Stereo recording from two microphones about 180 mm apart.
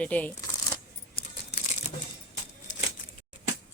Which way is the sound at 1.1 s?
50° left (ahead or behind).